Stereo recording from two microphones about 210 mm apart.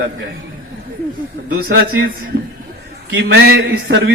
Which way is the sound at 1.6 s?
55° right (ahead or behind).